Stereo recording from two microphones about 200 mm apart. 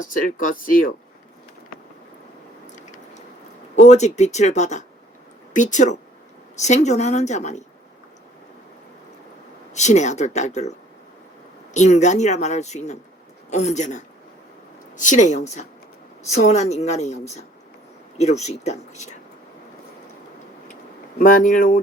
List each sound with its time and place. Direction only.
0.0 s speech: 40° left (ahead or behind)
3.8 s speech: 35° left (ahead or behind)
9.7 s speech: 35° left (ahead or behind)
21.2 s speech: 45° left (ahead or behind)